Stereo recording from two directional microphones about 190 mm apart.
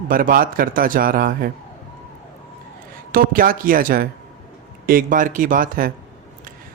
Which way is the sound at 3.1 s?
50° right (ahead or behind).